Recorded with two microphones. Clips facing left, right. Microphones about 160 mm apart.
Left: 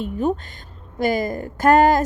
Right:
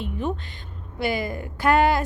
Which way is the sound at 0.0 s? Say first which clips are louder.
Left 6 dB; 40° left (ahead or behind).